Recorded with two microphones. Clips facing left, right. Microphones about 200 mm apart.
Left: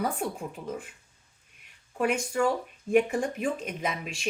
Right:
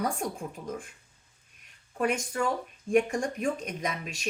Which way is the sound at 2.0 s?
5° left (ahead or behind).